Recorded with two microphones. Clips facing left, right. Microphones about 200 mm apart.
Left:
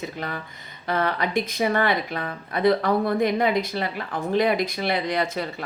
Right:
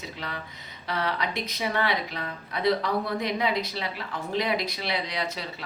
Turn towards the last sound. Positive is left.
turn(degrees=50)  # may be behind; listen again after turning